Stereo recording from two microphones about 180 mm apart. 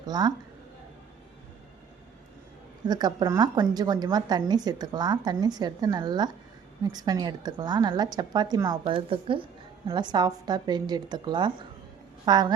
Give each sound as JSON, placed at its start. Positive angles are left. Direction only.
{"t": 0.0, "sound": "a woman's voice", "side_deg": -20}
{"t": 2.8, "sound": "a woman's voice", "side_deg": -25}